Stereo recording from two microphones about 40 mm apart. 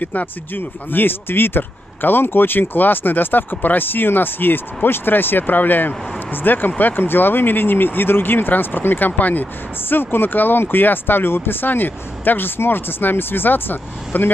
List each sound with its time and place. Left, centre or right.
0.0 s speech: left